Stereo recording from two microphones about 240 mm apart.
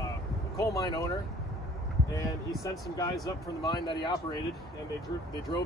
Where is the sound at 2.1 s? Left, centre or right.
Centre.